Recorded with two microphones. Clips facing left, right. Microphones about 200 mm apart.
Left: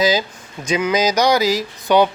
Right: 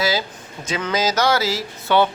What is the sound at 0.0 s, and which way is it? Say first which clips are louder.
Speech: left 4 dB; 15° left (ahead or behind).